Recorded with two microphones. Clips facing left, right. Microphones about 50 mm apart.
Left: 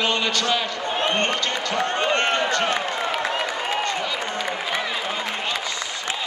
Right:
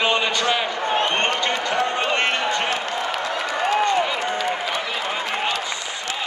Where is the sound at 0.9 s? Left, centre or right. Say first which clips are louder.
Right 1 dB; right.